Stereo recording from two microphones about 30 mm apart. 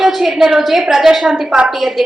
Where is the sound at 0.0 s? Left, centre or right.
Centre.